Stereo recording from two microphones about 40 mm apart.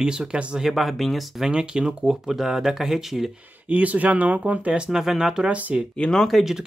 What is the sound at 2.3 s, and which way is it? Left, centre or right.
Speech, centre.